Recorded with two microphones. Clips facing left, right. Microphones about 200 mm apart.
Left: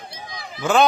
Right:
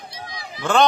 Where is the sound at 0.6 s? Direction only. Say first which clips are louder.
Left 1 dB; 5° left (ahead or behind).